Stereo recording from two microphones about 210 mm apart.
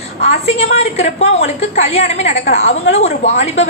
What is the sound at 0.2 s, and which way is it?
A woman's voice, 30° left (ahead or behind).